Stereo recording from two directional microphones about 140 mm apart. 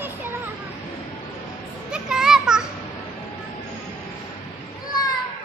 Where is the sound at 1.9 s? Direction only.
5° right (ahead or behind).